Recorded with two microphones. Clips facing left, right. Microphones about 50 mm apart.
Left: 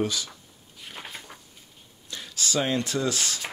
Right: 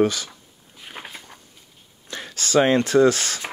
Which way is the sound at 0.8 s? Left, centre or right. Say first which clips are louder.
Right 3 dB; centre.